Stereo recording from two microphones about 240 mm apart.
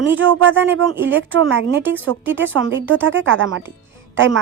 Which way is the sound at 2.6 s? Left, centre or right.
Right.